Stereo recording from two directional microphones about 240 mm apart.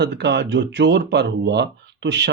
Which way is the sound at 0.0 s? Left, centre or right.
Right.